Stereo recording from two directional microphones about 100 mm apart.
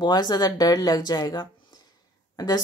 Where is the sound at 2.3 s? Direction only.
40° left (ahead or behind).